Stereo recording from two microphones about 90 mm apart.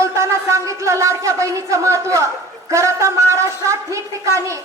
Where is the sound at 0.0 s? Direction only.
35° right (ahead or behind).